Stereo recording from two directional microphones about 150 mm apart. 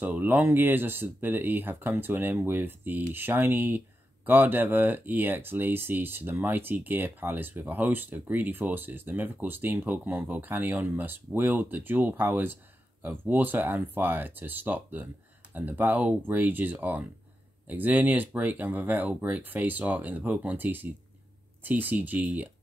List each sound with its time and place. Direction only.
0.0 s speech: 10° right (ahead or behind)